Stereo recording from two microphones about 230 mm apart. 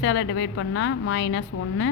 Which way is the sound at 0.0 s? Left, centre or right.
Left.